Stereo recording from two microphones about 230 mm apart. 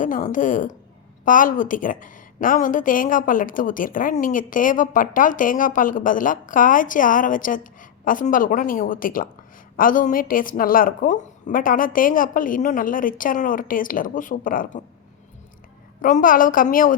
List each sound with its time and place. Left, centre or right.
0.0 s a woman's voice: left
16.0 s a woman's voice: left